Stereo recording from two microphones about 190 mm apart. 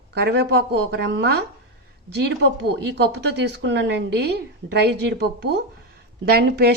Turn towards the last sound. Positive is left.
turn(degrees=-55)  # may be behind; listen again after turning